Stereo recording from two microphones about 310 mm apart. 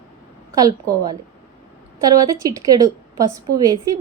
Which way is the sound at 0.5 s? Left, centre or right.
Centre.